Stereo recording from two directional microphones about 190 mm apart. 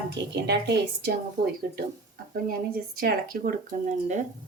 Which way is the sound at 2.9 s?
50° right (ahead or behind).